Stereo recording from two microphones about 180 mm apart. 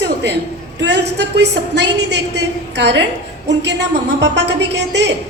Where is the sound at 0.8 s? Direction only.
70° right (ahead or behind).